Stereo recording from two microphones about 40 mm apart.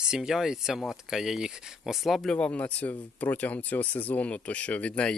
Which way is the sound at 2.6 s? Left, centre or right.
Left.